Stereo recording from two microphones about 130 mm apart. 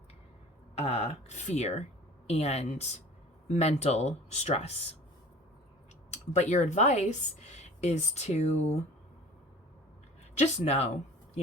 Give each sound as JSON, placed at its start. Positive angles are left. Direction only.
{"t": 0.8, "sound": "speech", "side_deg": 55}
{"t": 6.1, "sound": "speech", "side_deg": 60}
{"t": 10.3, "sound": "speech", "side_deg": 60}